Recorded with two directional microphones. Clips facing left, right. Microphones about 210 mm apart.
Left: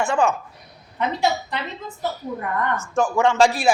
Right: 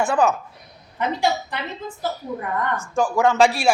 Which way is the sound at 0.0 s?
5° right (ahead or behind).